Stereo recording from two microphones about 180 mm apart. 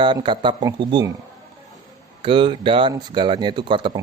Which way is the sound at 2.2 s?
30° right (ahead or behind).